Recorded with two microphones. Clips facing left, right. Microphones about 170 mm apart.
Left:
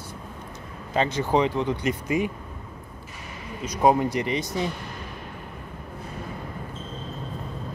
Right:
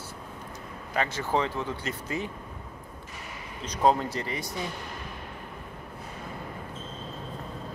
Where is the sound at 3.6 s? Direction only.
10° left (ahead or behind).